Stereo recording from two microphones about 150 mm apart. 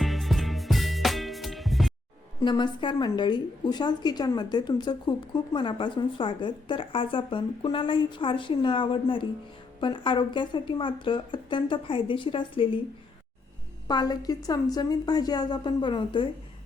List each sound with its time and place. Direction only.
0.0 s music: centre (ahead or behind)
2.4 s a woman's voice: 30° left (ahead or behind)
13.8 s a woman's voice: 25° left (ahead or behind)